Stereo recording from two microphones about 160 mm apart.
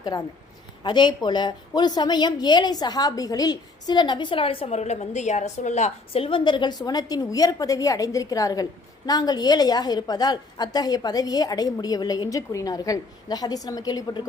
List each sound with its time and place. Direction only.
0.1 s a woman's voice: 25° left (ahead or behind)